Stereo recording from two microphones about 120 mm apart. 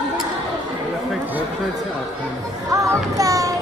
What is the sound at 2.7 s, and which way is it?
Music, 25° right (ahead or behind).